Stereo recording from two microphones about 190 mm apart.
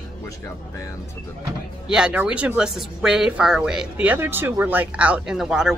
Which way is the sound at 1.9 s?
5° right (ahead or behind).